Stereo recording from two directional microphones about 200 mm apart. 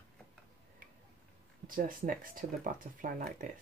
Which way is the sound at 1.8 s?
45° right (ahead or behind).